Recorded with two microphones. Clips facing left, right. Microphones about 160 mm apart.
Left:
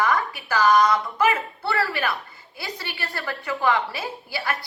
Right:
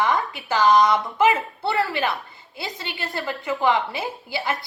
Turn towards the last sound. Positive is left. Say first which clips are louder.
# right 2 dB
turn(degrees=-20)  # may be behind; listen again after turning